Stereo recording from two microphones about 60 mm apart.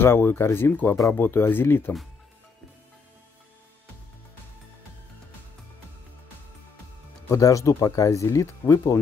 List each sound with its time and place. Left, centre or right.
0.0 s speech: left
7.3 s speech: left